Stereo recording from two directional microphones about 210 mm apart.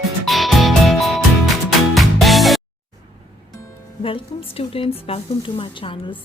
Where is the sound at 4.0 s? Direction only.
25° left (ahead or behind).